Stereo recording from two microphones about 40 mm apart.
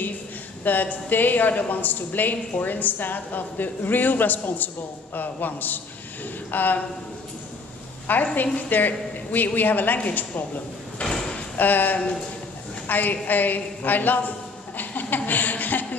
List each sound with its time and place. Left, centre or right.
0.7 s a woman's voice: left
8.1 s a woman's voice: left
11.1 s drawer open or close: centre
11.5 s a woman's voice: left
14.8 s chuckle: left